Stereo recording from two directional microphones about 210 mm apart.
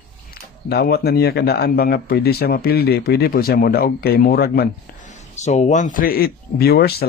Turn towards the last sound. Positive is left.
turn(degrees=45)  # may be behind; listen again after turning